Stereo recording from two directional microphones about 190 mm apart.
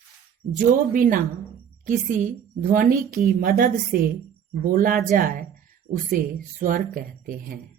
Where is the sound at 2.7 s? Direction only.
45° right (ahead or behind).